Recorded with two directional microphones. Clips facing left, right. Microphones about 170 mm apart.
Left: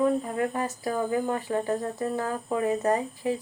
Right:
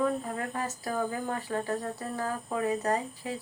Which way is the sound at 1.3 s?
20° left (ahead or behind).